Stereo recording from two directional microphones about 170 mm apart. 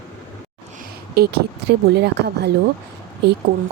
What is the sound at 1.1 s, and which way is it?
Speech, 70° right (ahead or behind).